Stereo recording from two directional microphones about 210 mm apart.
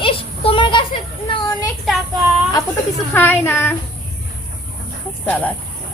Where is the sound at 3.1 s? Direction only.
10° left (ahead or behind).